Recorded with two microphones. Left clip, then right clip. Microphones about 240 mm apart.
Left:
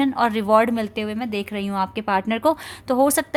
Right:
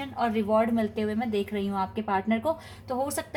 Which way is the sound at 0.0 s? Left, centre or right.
Left.